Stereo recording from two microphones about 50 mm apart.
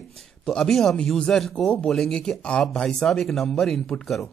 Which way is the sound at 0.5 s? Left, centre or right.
Centre.